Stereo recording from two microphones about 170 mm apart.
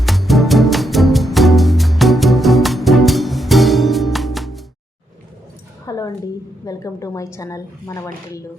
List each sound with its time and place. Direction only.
0.0 s music: centre (ahead or behind)
5.8 s a sound: 20° left (ahead or behind)
6.7 s a woman's voice: 20° left (ahead or behind)